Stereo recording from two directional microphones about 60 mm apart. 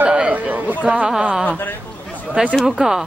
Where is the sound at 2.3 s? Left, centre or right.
Right.